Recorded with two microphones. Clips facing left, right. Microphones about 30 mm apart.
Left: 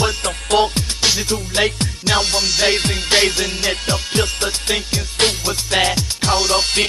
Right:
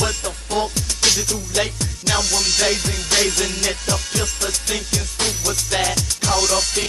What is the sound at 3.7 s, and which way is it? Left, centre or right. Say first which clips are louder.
Music: left 3 dB; left.